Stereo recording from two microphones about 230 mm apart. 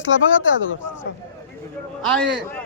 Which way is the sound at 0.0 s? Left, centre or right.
Left.